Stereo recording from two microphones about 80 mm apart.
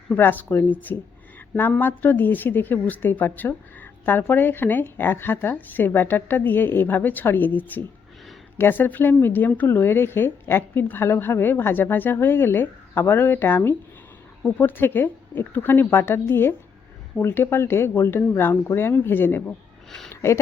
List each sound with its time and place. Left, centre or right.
0.1 s a woman's voice: left